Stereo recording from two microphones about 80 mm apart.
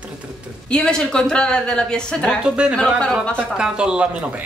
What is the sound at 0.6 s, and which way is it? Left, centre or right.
Speech, centre.